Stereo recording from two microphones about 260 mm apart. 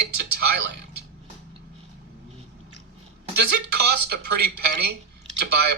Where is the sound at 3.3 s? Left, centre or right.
Right.